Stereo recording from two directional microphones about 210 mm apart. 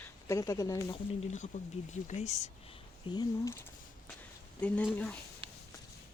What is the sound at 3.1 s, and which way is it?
Speech, 15° left (ahead or behind).